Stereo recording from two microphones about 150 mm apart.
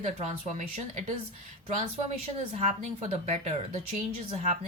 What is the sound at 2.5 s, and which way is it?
Speech, 50° right (ahead or behind).